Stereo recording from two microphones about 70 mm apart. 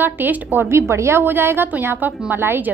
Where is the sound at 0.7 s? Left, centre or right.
Right.